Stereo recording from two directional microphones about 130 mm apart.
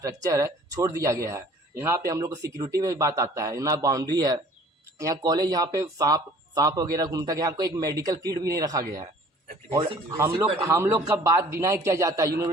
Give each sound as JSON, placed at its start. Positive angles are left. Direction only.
{"t": 0.0, "sound": "speech", "side_deg": -25}
{"t": 9.6, "sound": "a man's voice", "side_deg": -45}
{"t": 10.1, "sound": "speech", "side_deg": -20}